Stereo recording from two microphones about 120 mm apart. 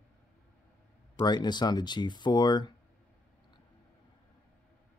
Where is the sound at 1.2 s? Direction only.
40° left (ahead or behind).